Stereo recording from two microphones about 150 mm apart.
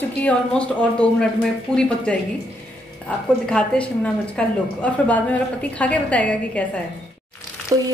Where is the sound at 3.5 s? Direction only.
10° left (ahead or behind).